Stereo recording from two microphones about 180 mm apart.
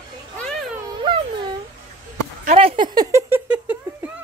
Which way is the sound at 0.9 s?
25° right (ahead or behind).